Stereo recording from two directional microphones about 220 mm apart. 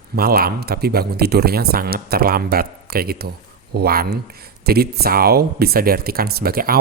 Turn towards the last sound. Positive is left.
turn(degrees=-45)  # may be behind; listen again after turning